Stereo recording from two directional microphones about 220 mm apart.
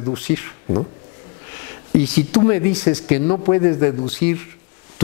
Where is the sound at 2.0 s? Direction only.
10° left (ahead or behind).